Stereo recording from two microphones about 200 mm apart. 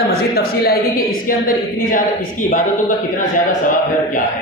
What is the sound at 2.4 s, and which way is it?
Speech, 90° left.